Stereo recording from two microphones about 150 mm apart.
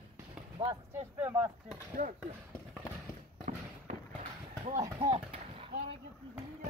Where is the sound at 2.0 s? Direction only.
60° right (ahead or behind).